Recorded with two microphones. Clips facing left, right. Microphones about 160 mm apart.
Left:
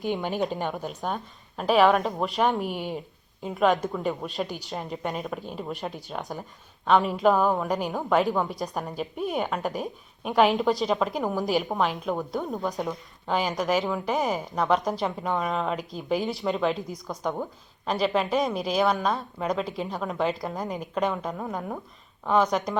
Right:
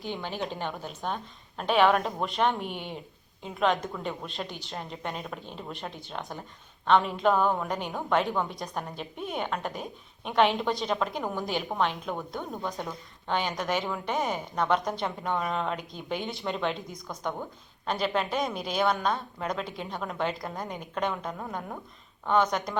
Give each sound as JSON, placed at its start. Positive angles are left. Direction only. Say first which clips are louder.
{"t": 0.1, "sound": "a woman's voice", "louder": "left 6 dB", "side_deg": 15}
{"t": 12.5, "sound": "a woman's voice", "louder": "left 5 dB", "side_deg": 20}
{"t": 13.2, "sound": "a woman's voice", "louder": "left 4 dB", "side_deg": 5}